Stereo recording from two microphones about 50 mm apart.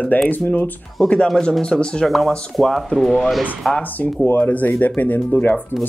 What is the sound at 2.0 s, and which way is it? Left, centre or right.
Speech, centre.